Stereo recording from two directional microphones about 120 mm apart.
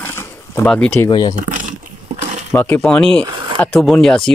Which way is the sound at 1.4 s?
90° right.